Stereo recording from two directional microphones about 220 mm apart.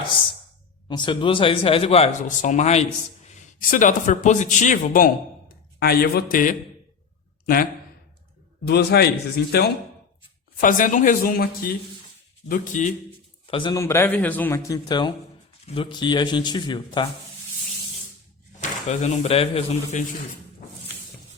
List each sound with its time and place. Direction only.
0.9 s a man's voice: 20° left (ahead or behind); by 9.7 s 45° left (ahead or behind)
10.6 s speech: 35° left (ahead or behind)
13.5 s a man's voice: 20° left (ahead or behind)
18.6 s speech: 30° left (ahead or behind)